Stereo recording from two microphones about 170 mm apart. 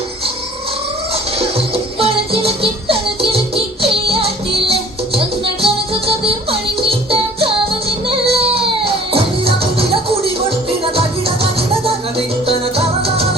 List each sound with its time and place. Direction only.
1.4 s music: 35° right (ahead or behind)
12.5 s music: 35° right (ahead or behind)